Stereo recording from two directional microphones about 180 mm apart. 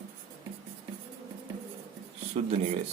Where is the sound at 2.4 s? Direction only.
35° right (ahead or behind).